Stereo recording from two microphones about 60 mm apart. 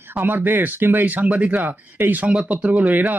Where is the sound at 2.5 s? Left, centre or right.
Right.